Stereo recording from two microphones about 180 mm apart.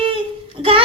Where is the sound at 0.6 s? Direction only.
30° right (ahead or behind).